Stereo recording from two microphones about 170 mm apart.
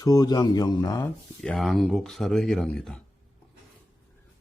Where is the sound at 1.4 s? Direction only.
Centre (ahead or behind).